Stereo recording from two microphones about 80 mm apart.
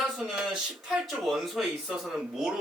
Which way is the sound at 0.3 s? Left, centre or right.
Centre.